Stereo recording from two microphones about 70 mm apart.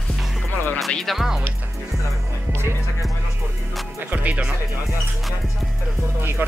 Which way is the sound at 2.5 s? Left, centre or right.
Right.